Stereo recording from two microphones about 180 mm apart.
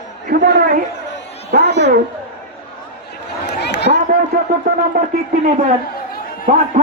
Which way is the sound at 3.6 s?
70° left (ahead or behind).